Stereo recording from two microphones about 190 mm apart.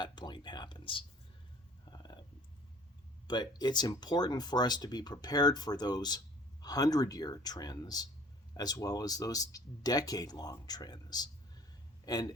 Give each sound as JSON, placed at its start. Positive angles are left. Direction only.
{"t": 0.0, "sound": "speech", "side_deg": 25}
{"t": 1.8, "sound": "a sound", "side_deg": 20}
{"t": 3.2, "sound": "speech", "side_deg": 20}